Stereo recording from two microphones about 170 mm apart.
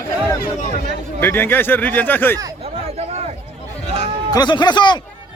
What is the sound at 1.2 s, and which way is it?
Speech, 10° left (ahead or behind).